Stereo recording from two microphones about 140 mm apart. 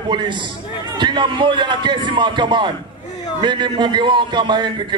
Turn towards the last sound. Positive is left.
turn(degrees=-35)  # may be behind; listen again after turning